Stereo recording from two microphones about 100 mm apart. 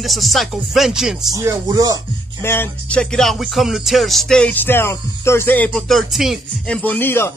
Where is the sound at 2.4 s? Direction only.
25° left (ahead or behind).